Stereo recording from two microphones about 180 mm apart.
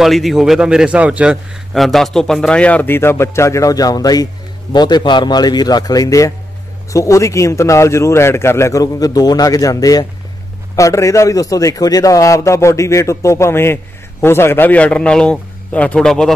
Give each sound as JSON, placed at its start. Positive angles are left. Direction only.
{"t": 0.0, "sound": "a man's voice", "side_deg": 0}